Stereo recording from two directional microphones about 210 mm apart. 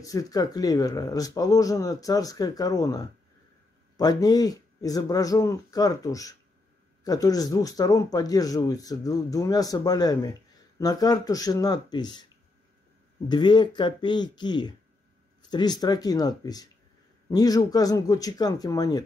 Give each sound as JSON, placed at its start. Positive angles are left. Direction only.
{"t": 0.0, "sound": "speech", "side_deg": 15}
{"t": 13.3, "sound": "speech", "side_deg": 20}